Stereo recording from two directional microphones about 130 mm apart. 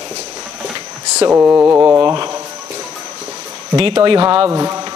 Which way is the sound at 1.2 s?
20° right (ahead or behind).